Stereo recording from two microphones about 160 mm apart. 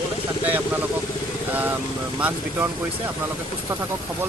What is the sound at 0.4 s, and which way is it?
Vehicle, 10° right (ahead or behind).